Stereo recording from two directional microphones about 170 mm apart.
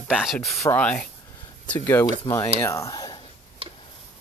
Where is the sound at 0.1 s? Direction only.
Centre (ahead or behind); by 3.2 s 25° left (ahead or behind).